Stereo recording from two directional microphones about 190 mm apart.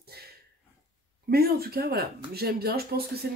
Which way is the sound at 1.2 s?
55° right (ahead or behind).